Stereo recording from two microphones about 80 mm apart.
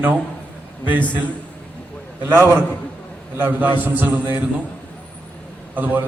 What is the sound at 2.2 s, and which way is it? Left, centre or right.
A man's voice, right.